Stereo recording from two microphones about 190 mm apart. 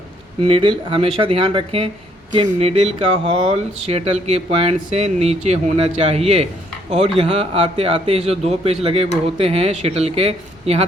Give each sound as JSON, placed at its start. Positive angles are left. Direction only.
{"t": 0.4, "sound": "speech", "side_deg": -25}